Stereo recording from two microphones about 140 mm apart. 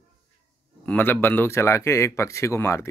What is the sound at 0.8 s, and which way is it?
A man's voice, 15° left (ahead or behind).